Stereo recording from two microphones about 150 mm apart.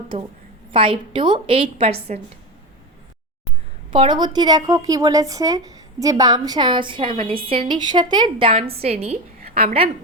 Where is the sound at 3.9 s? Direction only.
30° right (ahead or behind).